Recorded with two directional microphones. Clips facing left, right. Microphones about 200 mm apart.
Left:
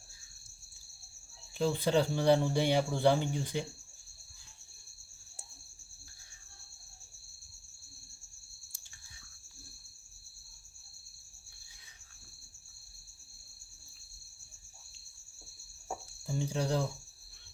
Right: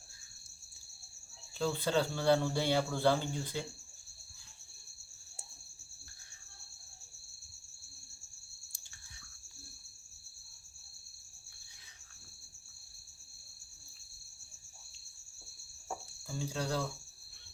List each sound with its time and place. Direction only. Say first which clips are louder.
1.5 s speech: left 3 dB; 20° left (ahead or behind)
16.2 s speech: left 4 dB; 20° left (ahead or behind)